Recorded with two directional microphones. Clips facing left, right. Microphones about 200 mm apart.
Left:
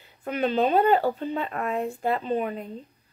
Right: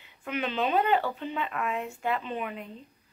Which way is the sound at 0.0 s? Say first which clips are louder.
Left 6 dB; 40° left (ahead or behind).